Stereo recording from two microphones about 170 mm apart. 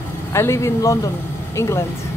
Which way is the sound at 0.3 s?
15° left (ahead or behind).